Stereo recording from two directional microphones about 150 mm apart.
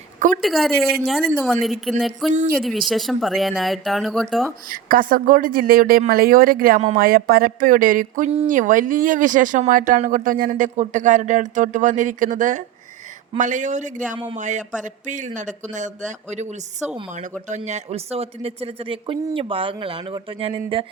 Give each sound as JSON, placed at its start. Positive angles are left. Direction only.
{"t": 0.4, "sound": "speech", "side_deg": 0}
{"t": 4.7, "sound": "speech", "side_deg": -70}
{"t": 10.8, "sound": "speech", "side_deg": -55}